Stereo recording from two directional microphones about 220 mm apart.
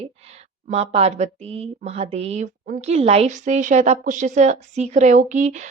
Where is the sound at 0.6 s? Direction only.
30° right (ahead or behind).